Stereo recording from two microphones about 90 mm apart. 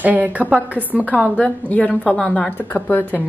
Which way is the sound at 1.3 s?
10° left (ahead or behind).